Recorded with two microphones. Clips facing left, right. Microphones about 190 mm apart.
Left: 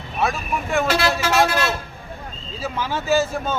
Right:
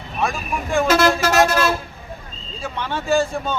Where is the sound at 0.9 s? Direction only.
45° right (ahead or behind).